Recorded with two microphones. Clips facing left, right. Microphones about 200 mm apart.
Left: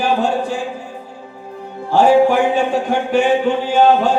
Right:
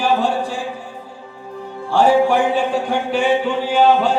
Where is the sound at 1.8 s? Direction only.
45° left (ahead or behind).